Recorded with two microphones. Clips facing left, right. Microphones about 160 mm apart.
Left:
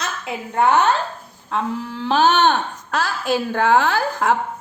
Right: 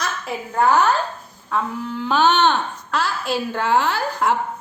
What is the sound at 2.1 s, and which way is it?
A woman's voice, 40° left (ahead or behind).